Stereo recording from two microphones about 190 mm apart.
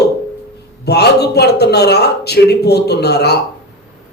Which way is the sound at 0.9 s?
60° left (ahead or behind).